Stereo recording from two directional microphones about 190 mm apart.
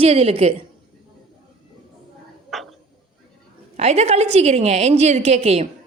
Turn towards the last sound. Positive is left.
turn(degrees=-35)  # may be behind; listen again after turning